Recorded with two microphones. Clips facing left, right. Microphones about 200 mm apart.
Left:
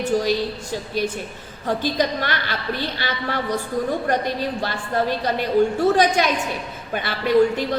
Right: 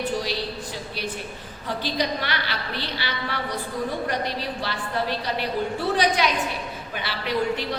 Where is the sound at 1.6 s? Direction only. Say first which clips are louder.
Left 5 dB; 45° left (ahead or behind).